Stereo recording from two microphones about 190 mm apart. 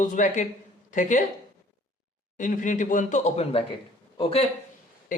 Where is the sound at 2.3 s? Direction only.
40° left (ahead or behind).